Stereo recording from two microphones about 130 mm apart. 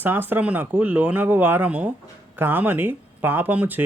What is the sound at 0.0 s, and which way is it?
Speech, 15° right (ahead or behind).